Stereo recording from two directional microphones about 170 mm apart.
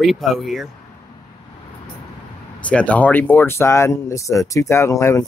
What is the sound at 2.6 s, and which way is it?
Speech, 10° left (ahead or behind).